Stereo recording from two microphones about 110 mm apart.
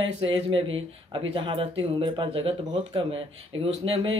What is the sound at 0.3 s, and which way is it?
Speech, 55° right (ahead or behind).